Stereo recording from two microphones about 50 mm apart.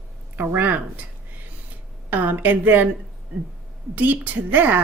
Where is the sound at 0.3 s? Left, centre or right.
Right.